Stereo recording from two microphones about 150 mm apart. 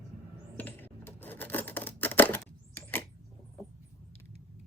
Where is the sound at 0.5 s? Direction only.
15° left (ahead or behind).